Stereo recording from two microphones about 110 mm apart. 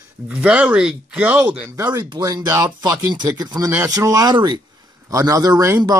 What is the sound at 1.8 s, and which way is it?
Speech, 25° right (ahead or behind).